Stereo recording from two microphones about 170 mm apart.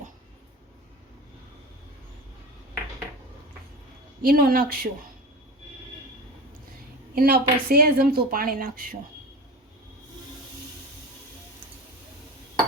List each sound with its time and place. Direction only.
4.2 s a woman's voice: 60° right (ahead or behind)
7.2 s a woman's voice: 65° right (ahead or behind)